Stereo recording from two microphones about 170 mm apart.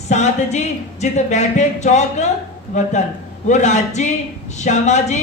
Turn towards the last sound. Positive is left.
turn(degrees=45)  # may be behind; listen again after turning